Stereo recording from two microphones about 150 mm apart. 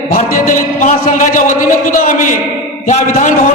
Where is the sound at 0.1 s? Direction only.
65° left (ahead or behind).